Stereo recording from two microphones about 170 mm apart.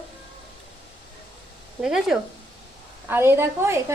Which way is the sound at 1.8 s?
5° right (ahead or behind).